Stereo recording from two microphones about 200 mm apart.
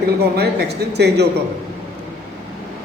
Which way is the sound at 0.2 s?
55° right (ahead or behind).